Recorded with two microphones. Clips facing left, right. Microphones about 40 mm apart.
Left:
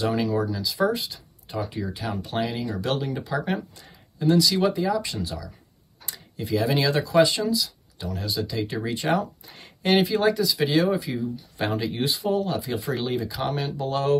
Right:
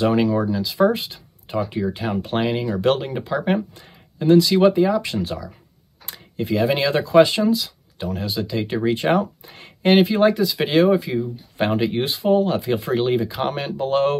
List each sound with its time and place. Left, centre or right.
0.0 s speech: right